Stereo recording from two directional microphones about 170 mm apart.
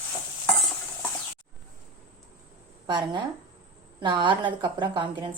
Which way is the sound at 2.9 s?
25° right (ahead or behind).